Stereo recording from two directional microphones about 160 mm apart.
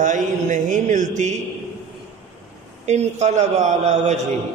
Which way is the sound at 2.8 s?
45° right (ahead or behind).